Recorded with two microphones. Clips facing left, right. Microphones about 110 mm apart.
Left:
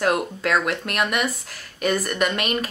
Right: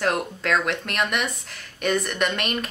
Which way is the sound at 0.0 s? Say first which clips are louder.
Left 3 dB; 5° left (ahead or behind).